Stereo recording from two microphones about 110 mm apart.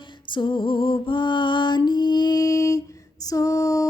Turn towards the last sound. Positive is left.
turn(degrees=30)  # may be behind; listen again after turning